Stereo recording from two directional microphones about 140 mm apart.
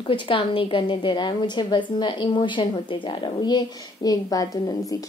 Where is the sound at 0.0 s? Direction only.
40° left (ahead or behind).